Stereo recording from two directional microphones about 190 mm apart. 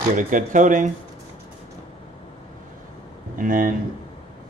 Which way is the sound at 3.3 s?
45° right (ahead or behind).